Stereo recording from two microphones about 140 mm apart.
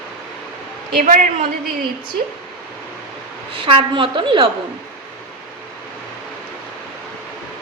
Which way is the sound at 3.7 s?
40° right (ahead or behind).